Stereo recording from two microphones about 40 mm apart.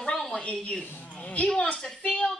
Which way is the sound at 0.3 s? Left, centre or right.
Left.